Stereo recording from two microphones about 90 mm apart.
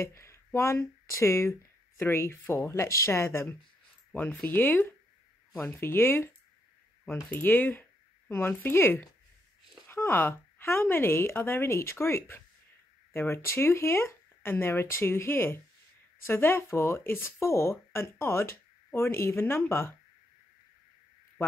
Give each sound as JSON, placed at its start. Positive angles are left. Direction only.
{"t": 0.0, "sound": "speech", "side_deg": 30}